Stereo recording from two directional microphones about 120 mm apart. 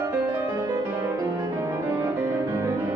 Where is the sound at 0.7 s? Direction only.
30° right (ahead or behind).